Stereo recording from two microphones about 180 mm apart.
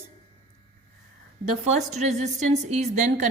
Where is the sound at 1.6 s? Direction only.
40° right (ahead or behind).